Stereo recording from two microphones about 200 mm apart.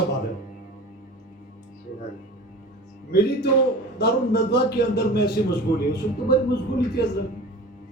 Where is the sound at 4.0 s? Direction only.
55° left (ahead or behind).